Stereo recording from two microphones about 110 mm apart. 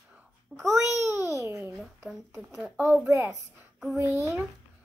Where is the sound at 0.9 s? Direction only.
25° right (ahead or behind).